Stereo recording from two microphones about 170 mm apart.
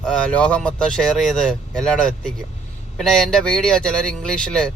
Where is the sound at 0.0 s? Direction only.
5° left (ahead or behind).